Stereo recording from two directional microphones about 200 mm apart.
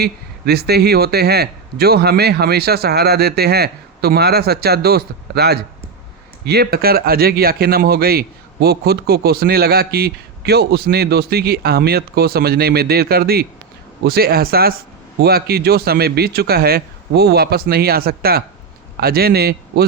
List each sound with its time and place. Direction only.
0.0 s a man's voice: 50° right (ahead or behind)